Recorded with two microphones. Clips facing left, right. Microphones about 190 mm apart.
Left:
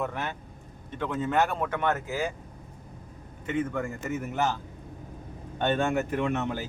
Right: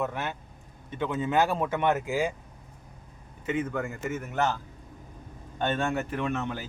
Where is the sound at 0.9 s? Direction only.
15° right (ahead or behind).